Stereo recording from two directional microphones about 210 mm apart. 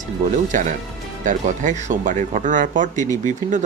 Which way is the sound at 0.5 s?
40° right (ahead or behind).